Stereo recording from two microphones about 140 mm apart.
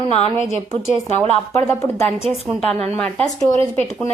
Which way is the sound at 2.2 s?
5° left (ahead or behind).